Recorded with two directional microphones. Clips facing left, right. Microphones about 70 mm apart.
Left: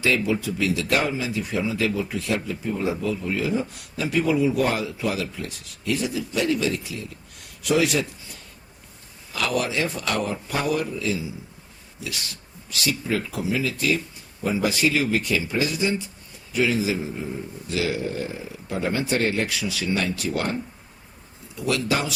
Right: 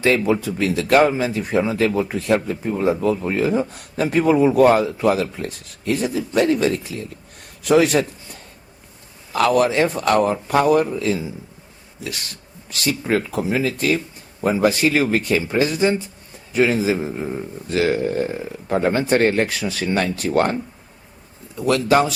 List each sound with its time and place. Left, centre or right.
0.0 s a man's voice: right
9.3 s a man's voice: right
12.9 s a man's voice: right
21.7 s speech: right